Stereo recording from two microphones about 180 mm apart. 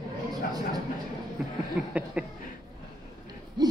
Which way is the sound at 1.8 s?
10° right (ahead or behind).